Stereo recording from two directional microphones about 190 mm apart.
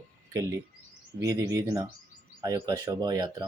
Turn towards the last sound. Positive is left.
turn(degrees=-20)  # may be behind; listen again after turning